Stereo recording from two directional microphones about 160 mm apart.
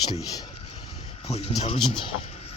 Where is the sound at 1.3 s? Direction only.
40° left (ahead or behind).